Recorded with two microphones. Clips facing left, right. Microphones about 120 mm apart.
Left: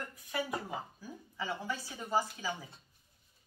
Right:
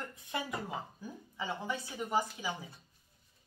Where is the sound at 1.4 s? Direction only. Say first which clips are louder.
Even; 20° right (ahead or behind).